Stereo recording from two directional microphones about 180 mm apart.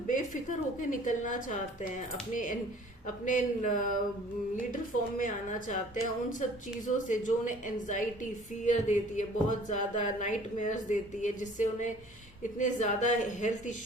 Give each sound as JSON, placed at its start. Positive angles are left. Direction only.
{"t": 0.8, "sound": "a woman's voice", "side_deg": 45}
{"t": 6.8, "sound": "a woman's voice", "side_deg": 45}